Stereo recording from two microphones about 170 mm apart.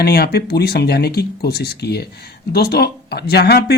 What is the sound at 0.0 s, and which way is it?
Speech, 70° left (ahead or behind).